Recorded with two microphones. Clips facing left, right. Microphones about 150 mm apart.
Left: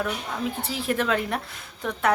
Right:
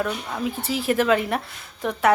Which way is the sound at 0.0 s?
Centre (ahead or behind).